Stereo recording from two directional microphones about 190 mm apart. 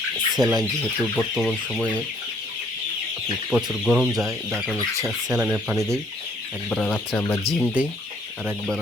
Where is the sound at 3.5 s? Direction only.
Centre (ahead or behind).